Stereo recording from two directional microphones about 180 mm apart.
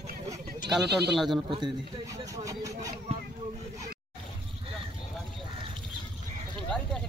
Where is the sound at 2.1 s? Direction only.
20° right (ahead or behind).